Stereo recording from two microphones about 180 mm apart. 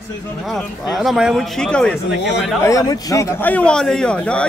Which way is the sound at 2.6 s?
20° left (ahead or behind).